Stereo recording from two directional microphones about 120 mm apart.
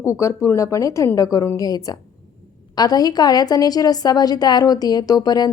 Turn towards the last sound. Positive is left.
turn(degrees=35)  # may be behind; listen again after turning